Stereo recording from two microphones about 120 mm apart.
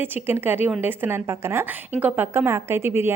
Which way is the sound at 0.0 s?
15° right (ahead or behind).